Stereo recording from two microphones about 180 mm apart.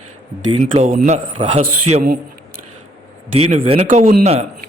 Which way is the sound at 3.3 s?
35° right (ahead or behind).